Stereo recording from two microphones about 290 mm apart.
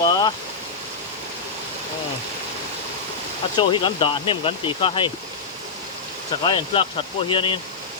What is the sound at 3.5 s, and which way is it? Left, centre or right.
Speech, centre.